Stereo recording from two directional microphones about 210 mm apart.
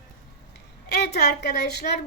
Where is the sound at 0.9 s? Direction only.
50° left (ahead or behind).